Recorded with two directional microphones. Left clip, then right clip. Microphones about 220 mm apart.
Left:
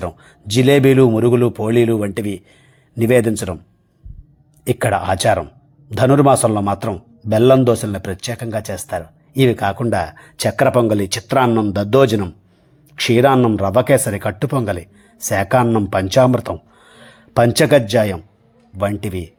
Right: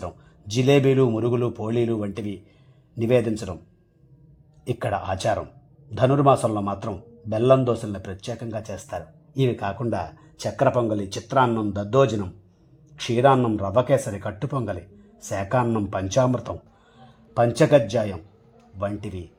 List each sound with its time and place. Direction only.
0.0 s a man's voice: 20° left (ahead or behind)
4.6 s a man's voice: 20° left (ahead or behind)